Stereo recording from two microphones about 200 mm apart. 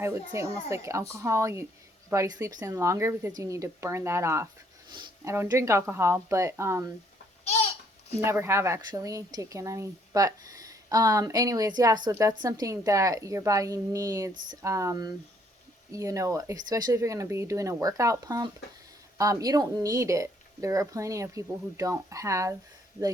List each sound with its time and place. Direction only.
0.3 s speech: 15° right (ahead or behind)
8.1 s speech: 15° right (ahead or behind)